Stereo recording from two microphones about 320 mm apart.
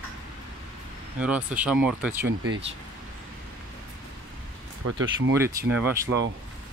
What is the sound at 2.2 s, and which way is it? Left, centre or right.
Speech, right.